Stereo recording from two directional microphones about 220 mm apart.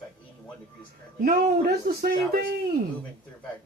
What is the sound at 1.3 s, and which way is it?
Speech, 45° right (ahead or behind).